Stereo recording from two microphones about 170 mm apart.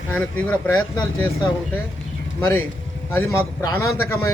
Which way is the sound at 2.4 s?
15° left (ahead or behind).